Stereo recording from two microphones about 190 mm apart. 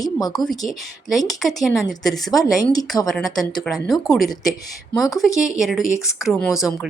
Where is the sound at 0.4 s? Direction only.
Centre (ahead or behind).